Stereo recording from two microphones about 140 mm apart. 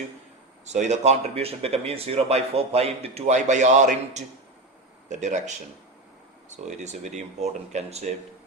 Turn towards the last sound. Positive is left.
turn(degrees=-50)  # may be behind; listen again after turning